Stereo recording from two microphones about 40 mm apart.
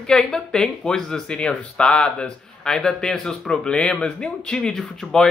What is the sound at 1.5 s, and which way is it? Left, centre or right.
Speech, left.